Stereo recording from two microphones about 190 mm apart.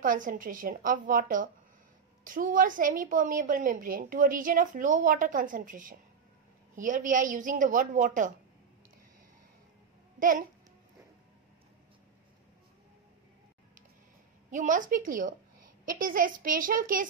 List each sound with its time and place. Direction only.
0.0 s a woman's voice: 45° right (ahead or behind)
10.1 s a child's voice: 45° right (ahead or behind)
14.5 s a woman's voice: 40° right (ahead or behind)